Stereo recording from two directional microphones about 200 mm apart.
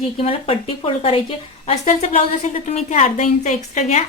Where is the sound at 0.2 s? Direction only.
30° left (ahead or behind).